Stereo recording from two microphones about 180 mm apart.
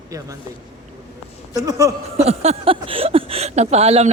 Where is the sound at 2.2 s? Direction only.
35° right (ahead or behind).